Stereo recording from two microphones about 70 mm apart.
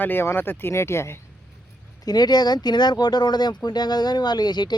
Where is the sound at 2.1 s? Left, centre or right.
Left.